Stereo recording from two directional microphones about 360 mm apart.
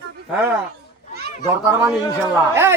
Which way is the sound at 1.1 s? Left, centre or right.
Right.